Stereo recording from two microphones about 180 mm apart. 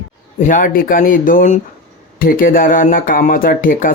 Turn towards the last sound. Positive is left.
turn(degrees=50)  # may be behind; listen again after turning